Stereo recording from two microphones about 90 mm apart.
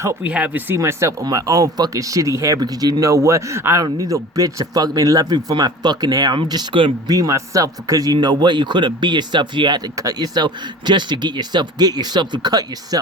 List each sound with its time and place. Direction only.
0.2 s speech: 15° right (ahead or behind)
0.8 s speech: 35° right (ahead or behind)
2.6 s speech: 45° right (ahead or behind)
7.1 s speech: 40° right (ahead or behind)